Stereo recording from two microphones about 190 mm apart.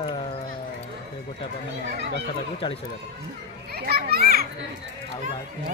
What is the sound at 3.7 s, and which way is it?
Speech, 55° right (ahead or behind).